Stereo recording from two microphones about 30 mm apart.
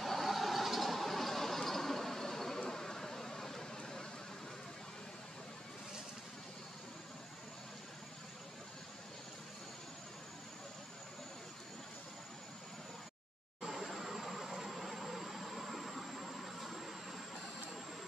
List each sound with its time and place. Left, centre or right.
0.0 s a sound: centre
2.7 s vehicle: centre
13.6 s vehicle: centre